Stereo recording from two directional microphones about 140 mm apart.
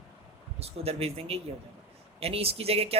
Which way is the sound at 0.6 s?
45° right (ahead or behind).